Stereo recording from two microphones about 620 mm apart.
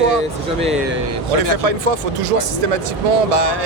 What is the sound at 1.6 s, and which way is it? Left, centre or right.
Speech, right.